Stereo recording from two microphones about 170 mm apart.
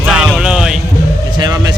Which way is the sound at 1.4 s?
25° right (ahead or behind).